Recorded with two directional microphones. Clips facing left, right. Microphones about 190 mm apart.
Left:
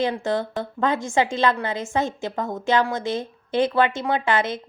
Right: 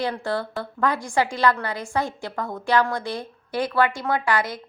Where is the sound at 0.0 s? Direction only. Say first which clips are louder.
Left 3 dB; 20° left (ahead or behind).